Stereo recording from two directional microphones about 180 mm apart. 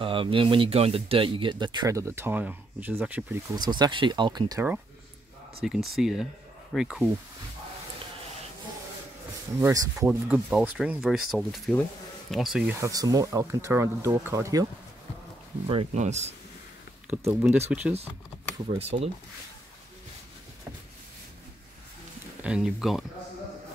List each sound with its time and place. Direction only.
0.0 s speech: 30° right (ahead or behind); by 3.5 s 10° right (ahead or behind)
3.5 s speech: 25° right (ahead or behind)
5.9 s speech: centre (ahead or behind)
9.6 s speech: 20° right (ahead or behind)
10.2 s speech: 5° right (ahead or behind)
12.8 s speech: 20° right (ahead or behind)
15.6 s speech: 30° right (ahead or behind)
17.1 s speech: 10° right (ahead or behind)
18.8 s speech: 35° right (ahead or behind)
22.4 s speech: 5° right (ahead or behind)